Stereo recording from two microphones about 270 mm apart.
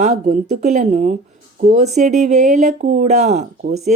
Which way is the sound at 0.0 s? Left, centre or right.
Right.